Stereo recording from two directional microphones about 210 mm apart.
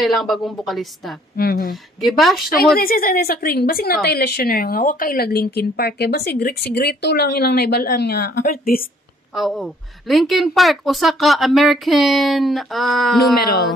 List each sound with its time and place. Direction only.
0.0 s a woman's voice: centre (ahead or behind)
1.3 s a woman's voice: 45° left (ahead or behind)
1.7 s a woman's voice: centre (ahead or behind)
2.8 s a woman's voice: 45° left (ahead or behind)
9.3 s a woman's voice: centre (ahead or behind)